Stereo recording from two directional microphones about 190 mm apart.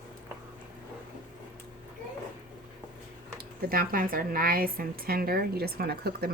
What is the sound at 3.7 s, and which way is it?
A woman's voice, 50° right (ahead or behind).